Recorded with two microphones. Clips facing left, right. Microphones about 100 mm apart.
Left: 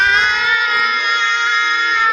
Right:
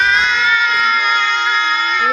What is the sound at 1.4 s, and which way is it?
Music, 5° right (ahead or behind).